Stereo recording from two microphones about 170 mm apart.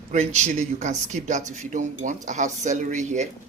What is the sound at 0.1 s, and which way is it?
Speech, 45° right (ahead or behind).